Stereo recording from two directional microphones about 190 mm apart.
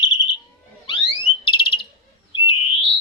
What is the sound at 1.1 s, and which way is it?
Alarm, 25° left (ahead or behind).